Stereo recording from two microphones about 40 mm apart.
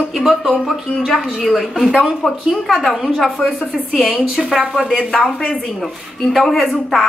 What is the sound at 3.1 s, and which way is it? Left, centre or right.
Speech, centre.